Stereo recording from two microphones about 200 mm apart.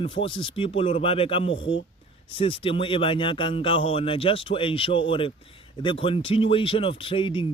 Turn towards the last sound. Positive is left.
turn(degrees=25)  # may be behind; listen again after turning